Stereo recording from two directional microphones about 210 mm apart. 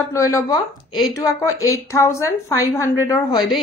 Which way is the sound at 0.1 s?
15° left (ahead or behind).